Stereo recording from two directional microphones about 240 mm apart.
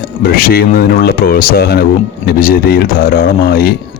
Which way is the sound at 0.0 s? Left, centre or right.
Left.